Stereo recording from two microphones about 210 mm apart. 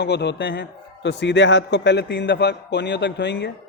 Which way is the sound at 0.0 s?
55° left (ahead or behind).